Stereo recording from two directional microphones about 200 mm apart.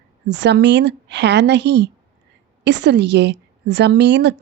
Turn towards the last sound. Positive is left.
turn(degrees=-60)  # may be behind; listen again after turning